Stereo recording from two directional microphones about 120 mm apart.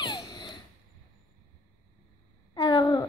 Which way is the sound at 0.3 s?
40° left (ahead or behind).